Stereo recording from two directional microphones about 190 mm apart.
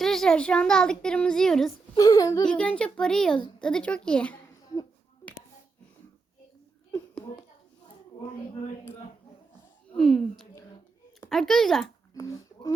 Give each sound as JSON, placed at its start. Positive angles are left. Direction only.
{"t": 0.0, "sound": "speech", "side_deg": 0}
{"t": 2.0, "sound": "a child's voice", "side_deg": 20}
{"t": 2.5, "sound": "speech", "side_deg": 5}
{"t": 9.9, "sound": "speech", "side_deg": 5}
{"t": 12.1, "sound": "a sound", "side_deg": 15}